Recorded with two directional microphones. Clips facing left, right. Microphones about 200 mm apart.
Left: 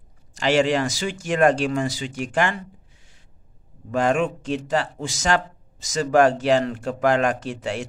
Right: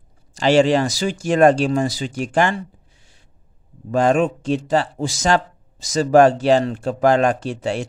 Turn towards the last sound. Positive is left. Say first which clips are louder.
# right 4 dB
turn(degrees=-30)  # may be behind; listen again after turning